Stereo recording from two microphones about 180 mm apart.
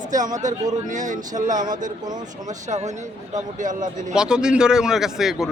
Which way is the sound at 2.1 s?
20° right (ahead or behind).